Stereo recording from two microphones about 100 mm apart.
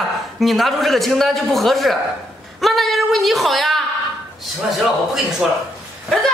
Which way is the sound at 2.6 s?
Centre (ahead or behind).